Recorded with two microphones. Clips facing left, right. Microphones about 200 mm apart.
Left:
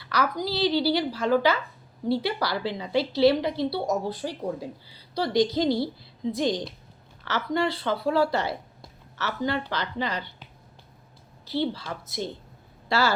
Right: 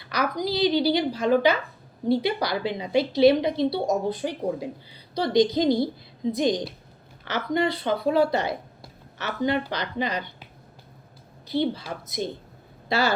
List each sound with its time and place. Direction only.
0.0 s a woman's voice: 15° right (ahead or behind)